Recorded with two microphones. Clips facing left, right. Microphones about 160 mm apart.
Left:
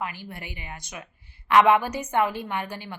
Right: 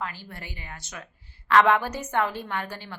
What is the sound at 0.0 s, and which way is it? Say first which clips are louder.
A woman's voice: left 2 dB; 15° left (ahead or behind).